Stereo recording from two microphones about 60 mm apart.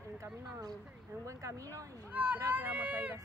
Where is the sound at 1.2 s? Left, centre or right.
Right.